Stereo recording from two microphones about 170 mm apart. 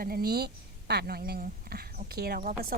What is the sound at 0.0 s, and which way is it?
A woman's voice, 60° right (ahead or behind).